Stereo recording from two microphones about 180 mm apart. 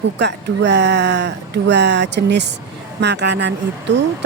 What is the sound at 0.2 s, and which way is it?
Speech, 75° right (ahead or behind).